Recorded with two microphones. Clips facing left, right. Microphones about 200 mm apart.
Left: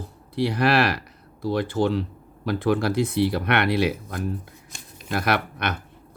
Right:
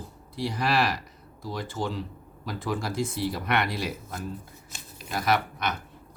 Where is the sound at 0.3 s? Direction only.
65° left (ahead or behind).